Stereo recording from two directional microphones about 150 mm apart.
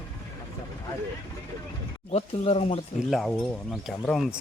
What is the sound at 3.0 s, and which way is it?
Speech, centre (ahead or behind).